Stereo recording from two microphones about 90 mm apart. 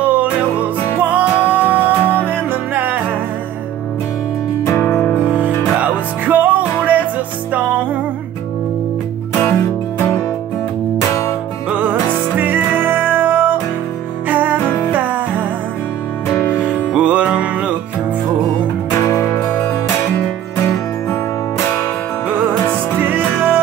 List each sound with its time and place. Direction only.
0.0 s music: 20° right (ahead or behind)
4.7 s music: 20° left (ahead or behind)
5.8 s music: 15° right (ahead or behind)
9.5 s music: 25° left (ahead or behind)
11.7 s music: 15° right (ahead or behind)
16.6 s music: 15° right (ahead or behind)
18.9 s music: 35° left (ahead or behind)
22.9 s music: 20° right (ahead or behind)